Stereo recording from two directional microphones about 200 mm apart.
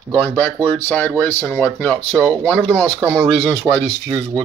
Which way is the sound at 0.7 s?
10° left (ahead or behind).